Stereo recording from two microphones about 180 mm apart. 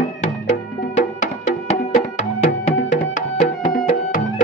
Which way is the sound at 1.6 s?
35° left (ahead or behind).